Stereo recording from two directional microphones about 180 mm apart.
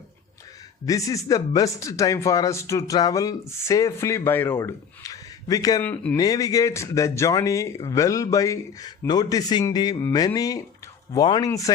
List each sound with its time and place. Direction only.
0.9 s a man's voice: 20° left (ahead or behind)
5.8 s speech: 10° left (ahead or behind)
6.1 s a man's voice: 20° left (ahead or behind)